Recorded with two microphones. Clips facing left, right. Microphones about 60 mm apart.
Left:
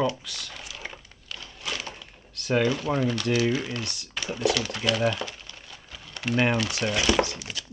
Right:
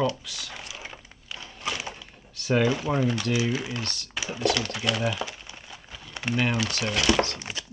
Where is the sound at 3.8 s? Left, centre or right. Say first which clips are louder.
Right 1 dB; centre.